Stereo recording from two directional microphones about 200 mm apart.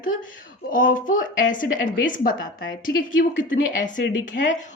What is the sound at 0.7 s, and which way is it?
A woman's voice, 40° left (ahead or behind).